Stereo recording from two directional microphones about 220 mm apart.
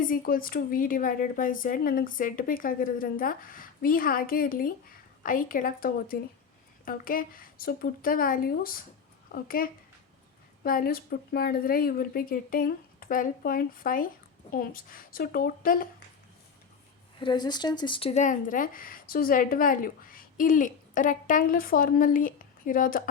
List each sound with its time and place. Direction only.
0.0 s speech: 40° left (ahead or behind)
17.2 s speech: 20° left (ahead or behind); by 23.0 s 40° left (ahead or behind)